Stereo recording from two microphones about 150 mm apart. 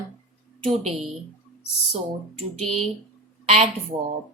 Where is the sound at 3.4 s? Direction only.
45° right (ahead or behind).